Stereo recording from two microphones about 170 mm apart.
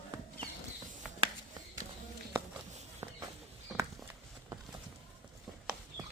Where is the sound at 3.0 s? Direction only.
15° right (ahead or behind).